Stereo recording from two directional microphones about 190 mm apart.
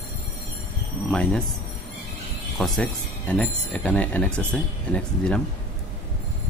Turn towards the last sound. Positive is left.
turn(degrees=5)  # may be behind; listen again after turning